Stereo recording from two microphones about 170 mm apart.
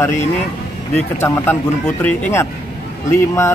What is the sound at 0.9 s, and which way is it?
Speech, 10° left (ahead or behind).